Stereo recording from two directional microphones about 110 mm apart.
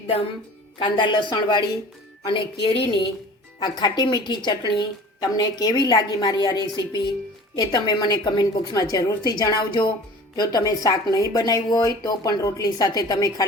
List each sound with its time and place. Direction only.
0.8 s a woman's voice: 45° left (ahead or behind)
3.6 s a woman's voice: 40° left (ahead or behind)